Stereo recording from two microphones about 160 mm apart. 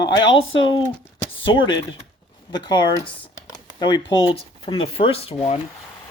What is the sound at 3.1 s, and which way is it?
Speech, 25° left (ahead or behind).